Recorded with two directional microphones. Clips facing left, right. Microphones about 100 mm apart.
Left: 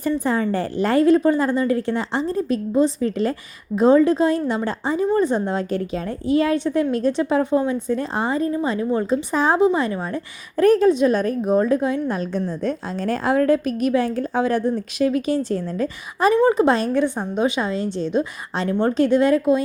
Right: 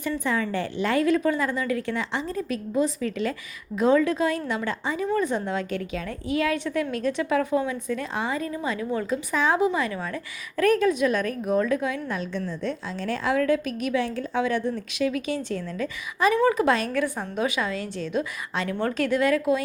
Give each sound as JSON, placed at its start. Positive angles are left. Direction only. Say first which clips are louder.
{"t": 0.3, "sound": "a woman's voice", "louder": "left 5 dB", "side_deg": 40}
{"t": 16.3, "sound": "a woman's voice", "louder": "left 5 dB", "side_deg": 25}